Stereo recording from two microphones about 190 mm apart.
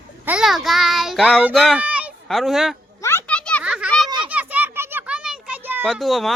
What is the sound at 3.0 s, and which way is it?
Children playing, 10° left (ahead or behind).